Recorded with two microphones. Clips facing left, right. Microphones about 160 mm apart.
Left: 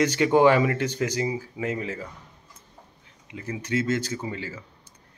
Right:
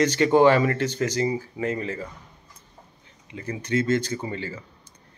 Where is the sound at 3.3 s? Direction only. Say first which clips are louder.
Right 2 dB; 5° left (ahead or behind).